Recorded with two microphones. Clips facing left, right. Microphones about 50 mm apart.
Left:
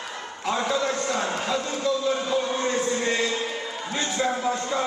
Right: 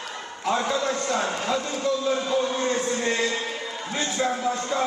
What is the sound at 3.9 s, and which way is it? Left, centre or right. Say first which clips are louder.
Speech: even; left.